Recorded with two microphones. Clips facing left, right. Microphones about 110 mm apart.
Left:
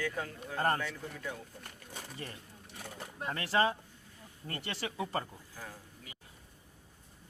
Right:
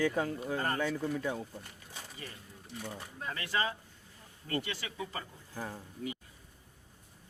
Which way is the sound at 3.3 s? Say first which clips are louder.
Left 5 dB; 35° left (ahead or behind).